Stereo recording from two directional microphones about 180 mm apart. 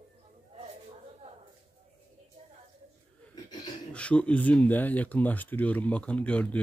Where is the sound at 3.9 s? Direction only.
5° left (ahead or behind).